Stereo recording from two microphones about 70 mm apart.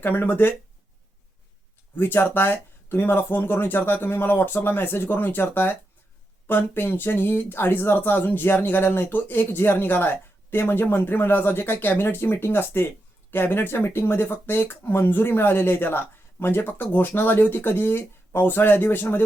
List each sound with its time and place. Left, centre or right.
0.0 s speech: left
2.0 s speech: left